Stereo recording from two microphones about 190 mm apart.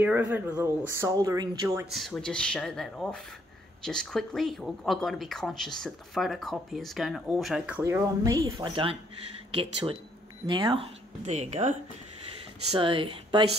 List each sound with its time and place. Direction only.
0.0 s speech: 10° right (ahead or behind)
1.9 s speech: centre (ahead or behind); by 8.9 s 25° right (ahead or behind)
10.4 s speech: 25° right (ahead or behind)
12.7 s speech: 25° right (ahead or behind)